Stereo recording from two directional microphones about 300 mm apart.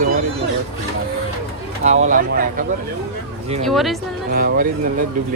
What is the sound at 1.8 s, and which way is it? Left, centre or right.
Speech, right.